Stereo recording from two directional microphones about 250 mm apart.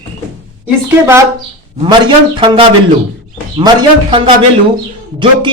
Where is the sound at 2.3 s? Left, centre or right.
Centre.